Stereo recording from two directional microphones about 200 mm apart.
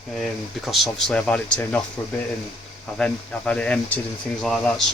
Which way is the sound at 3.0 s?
5° left (ahead or behind).